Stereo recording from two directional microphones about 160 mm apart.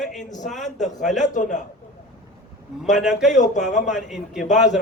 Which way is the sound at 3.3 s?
50° left (ahead or behind).